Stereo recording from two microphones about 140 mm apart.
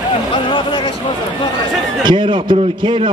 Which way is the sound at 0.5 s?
35° left (ahead or behind).